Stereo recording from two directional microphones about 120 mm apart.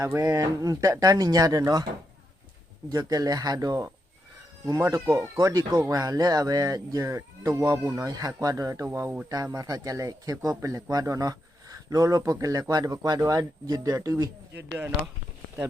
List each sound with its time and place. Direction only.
0.0 s speech: 25° right (ahead or behind)
2.9 s speech: 35° right (ahead or behind); by 9.2 s 20° right (ahead or behind)
9.6 s speech: 30° right (ahead or behind)